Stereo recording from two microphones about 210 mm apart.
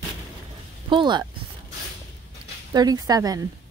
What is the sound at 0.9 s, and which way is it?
Speech, 20° right (ahead or behind).